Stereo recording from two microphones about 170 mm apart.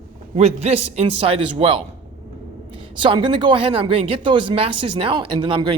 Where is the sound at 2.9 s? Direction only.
30° right (ahead or behind).